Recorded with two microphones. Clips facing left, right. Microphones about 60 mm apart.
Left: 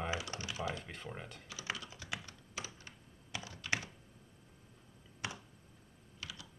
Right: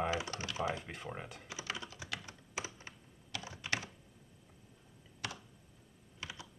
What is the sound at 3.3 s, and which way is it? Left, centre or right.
Computer keyboard, left.